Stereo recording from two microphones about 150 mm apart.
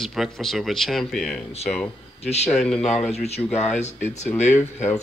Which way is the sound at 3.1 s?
45° left (ahead or behind).